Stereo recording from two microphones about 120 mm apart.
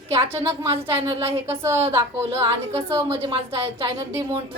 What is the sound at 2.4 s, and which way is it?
A woman's voice, 50° right (ahead or behind).